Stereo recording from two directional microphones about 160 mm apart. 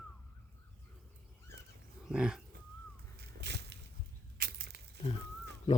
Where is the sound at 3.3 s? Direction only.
90° right.